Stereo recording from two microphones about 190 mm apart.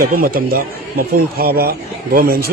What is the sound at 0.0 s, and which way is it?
A man's voice, 50° right (ahead or behind).